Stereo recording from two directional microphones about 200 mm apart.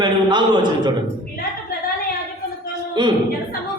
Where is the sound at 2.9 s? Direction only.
20° right (ahead or behind).